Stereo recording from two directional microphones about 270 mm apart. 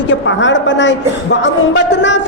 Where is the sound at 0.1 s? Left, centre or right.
Left.